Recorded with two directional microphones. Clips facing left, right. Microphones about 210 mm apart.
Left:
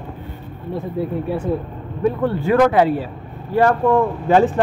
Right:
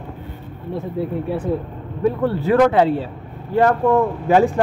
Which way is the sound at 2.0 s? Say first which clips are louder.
Even; 35° right (ahead or behind).